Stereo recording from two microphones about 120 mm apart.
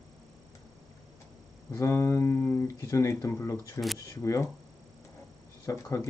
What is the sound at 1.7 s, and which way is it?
Speech, 20° left (ahead or behind).